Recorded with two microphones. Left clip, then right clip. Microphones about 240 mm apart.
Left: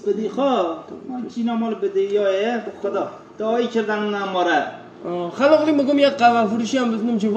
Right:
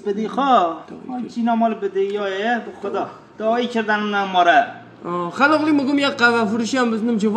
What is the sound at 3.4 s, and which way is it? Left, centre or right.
A man's voice, right.